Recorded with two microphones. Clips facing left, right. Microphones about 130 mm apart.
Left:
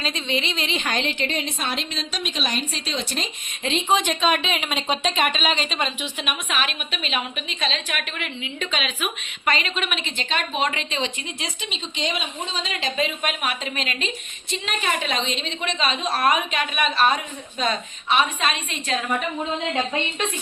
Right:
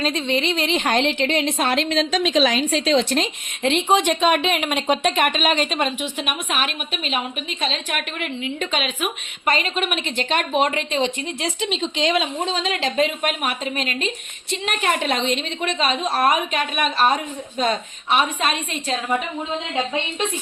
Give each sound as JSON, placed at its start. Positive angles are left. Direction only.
{"t": 0.0, "sound": "speech", "side_deg": -60}
{"t": 0.9, "sound": "a woman's voice", "side_deg": -75}
{"t": 10.7, "sound": "a woman's voice", "side_deg": -50}
{"t": 11.6, "sound": "speech", "side_deg": -90}
{"t": 14.5, "sound": "a woman's voice", "side_deg": -60}